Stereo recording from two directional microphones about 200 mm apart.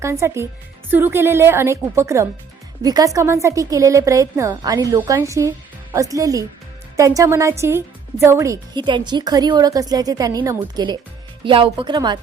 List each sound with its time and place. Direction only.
0.0 s a woman's voice: 15° right (ahead or behind)